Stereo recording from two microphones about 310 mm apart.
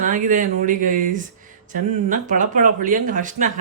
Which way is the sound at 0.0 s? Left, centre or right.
Right.